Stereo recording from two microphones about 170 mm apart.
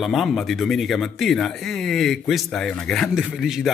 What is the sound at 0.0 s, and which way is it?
Speech, centre (ahead or behind).